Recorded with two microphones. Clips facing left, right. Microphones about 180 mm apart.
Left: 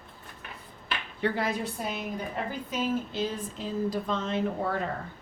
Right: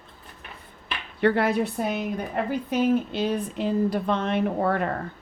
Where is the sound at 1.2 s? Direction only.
65° right (ahead or behind).